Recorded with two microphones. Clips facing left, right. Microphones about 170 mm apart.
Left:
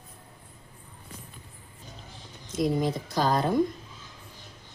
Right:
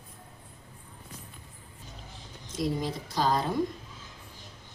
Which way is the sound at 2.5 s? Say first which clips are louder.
Left 5 dB; 50° left (ahead or behind).